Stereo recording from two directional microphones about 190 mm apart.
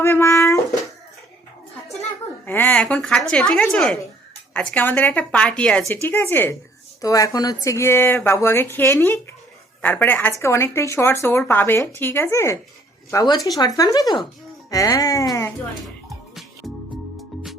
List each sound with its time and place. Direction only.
0.0 s speech: 15° left (ahead or behind)
2.5 s a woman's voice: 10° left (ahead or behind)
16.0 s music: centre (ahead or behind)